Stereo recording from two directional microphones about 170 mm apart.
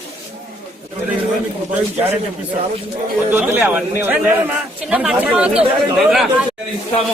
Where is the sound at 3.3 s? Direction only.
10° right (ahead or behind).